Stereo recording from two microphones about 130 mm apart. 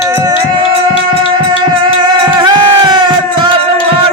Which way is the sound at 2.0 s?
40° right (ahead or behind).